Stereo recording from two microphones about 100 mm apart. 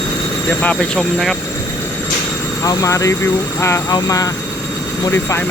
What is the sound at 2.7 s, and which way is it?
Speech, 30° left (ahead or behind).